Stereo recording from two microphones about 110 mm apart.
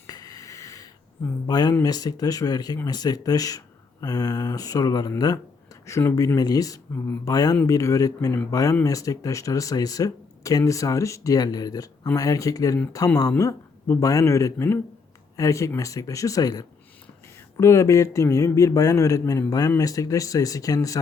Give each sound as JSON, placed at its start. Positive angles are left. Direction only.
{"t": 0.1, "sound": "a sound", "side_deg": 35}
{"t": 1.8, "sound": "a man's voice", "side_deg": 35}
{"t": 5.8, "sound": "a man's voice", "side_deg": 25}